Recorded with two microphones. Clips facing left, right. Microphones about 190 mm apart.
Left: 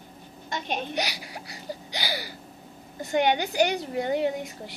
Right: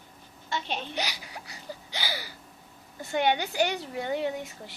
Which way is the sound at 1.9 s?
15° left (ahead or behind).